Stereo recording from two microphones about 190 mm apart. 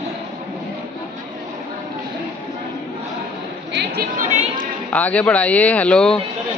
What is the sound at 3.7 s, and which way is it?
Chatter, 55° right (ahead or behind).